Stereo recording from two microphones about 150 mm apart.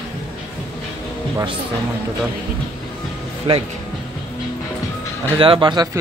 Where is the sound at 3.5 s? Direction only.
35° right (ahead or behind).